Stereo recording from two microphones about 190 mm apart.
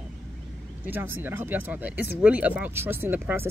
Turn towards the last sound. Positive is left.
turn(degrees=-10)  # may be behind; listen again after turning